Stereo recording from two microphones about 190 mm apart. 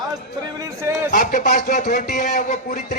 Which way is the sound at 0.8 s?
15° right (ahead or behind).